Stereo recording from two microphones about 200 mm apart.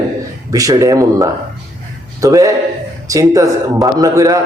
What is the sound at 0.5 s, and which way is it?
A man's voice, 15° right (ahead or behind).